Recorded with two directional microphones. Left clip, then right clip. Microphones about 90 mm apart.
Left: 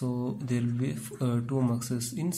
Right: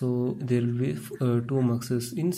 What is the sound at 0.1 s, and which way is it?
Speech, 25° right (ahead or behind).